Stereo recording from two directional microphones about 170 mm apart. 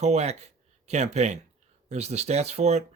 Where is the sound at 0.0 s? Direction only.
40° right (ahead or behind).